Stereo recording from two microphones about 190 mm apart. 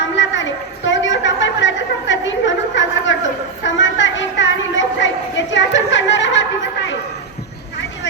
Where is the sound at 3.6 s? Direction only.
75° left (ahead or behind).